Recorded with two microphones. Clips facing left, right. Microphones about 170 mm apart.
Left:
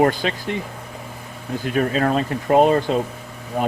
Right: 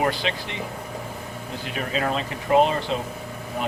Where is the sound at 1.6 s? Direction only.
45° left (ahead or behind).